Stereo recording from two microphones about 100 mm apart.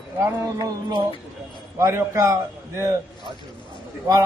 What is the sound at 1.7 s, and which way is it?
Speech, 25° right (ahead or behind).